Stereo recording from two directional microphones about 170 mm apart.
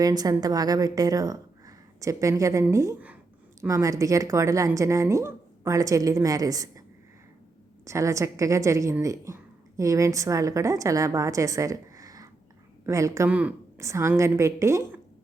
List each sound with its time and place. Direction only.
0.0 s a woman's voice: 20° right (ahead or behind)
7.9 s a woman's voice: 15° right (ahead or behind)